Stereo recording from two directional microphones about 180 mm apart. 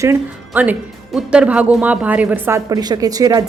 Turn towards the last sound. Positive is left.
turn(degrees=-20)  # may be behind; listen again after turning